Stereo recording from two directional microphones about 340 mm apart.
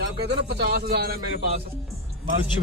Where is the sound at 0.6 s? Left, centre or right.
Right.